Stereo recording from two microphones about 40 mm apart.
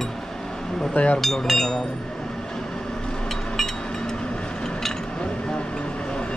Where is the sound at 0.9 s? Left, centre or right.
Left.